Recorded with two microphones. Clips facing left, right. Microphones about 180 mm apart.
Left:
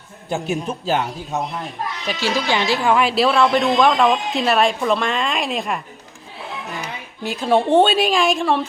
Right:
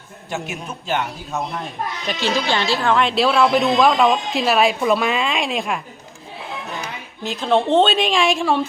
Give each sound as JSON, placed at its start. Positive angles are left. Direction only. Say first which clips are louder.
{"t": 0.3, "sound": "speech", "louder": "left 5 dB", "side_deg": 30}
{"t": 2.0, "sound": "a woman's voice", "louder": "even", "side_deg": 10}
{"t": 7.3, "sound": "a woman's voice", "louder": "left 1 dB", "side_deg": 10}